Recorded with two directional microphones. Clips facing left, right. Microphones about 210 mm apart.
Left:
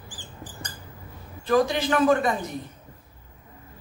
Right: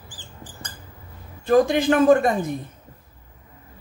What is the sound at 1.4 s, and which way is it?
Speech, 50° right (ahead or behind).